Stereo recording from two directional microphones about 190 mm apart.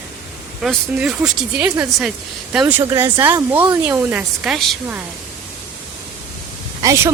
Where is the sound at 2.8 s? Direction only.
20° right (ahead or behind).